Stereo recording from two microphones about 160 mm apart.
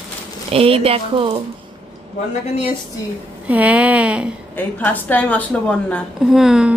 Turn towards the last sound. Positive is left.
turn(degrees=-5)  # may be behind; listen again after turning